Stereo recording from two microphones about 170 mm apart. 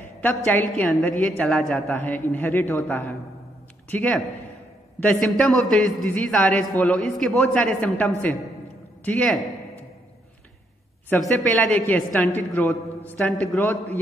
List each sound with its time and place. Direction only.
0.2 s a man's voice: 10° left (ahead or behind)
5.4 s a man's voice: 5° left (ahead or behind)
11.1 s a man's voice: 10° left (ahead or behind)